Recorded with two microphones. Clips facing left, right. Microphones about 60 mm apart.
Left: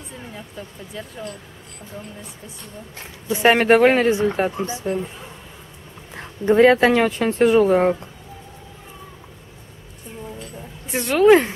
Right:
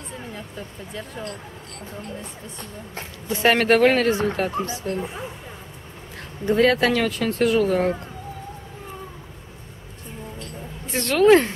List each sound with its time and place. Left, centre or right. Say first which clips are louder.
0.9 s speech: left 1 dB; centre
3.3 s speech: left 3 dB; centre
6.1 s speech: left 5 dB; left
10.4 s a sound: right 1 dB; centre